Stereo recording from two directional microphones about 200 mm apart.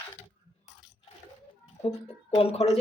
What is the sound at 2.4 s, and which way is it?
Speech, 30° left (ahead or behind).